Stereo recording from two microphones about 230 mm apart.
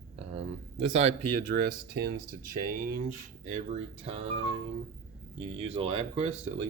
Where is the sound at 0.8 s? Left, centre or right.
Right.